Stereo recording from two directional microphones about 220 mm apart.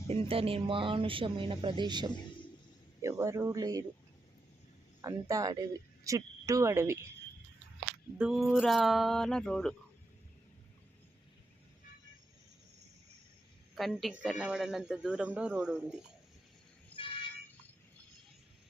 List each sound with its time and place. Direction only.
0.1 s speech: 25° right (ahead or behind)
5.0 s a woman's voice: 15° right (ahead or behind)
8.2 s speech: centre (ahead or behind)
13.7 s speech: centre (ahead or behind)
16.9 s a sound: 5° left (ahead or behind)